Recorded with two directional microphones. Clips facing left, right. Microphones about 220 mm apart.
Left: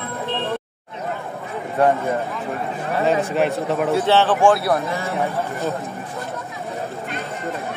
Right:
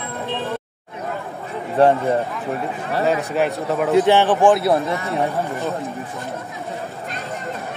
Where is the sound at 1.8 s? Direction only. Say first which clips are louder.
Right 3 dB; 30° right (ahead or behind).